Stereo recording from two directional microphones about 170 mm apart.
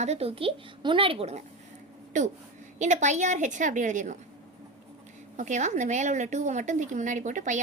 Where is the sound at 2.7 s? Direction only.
45° right (ahead or behind).